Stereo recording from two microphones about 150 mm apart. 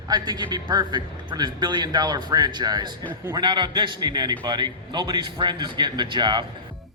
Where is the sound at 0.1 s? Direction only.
30° right (ahead or behind).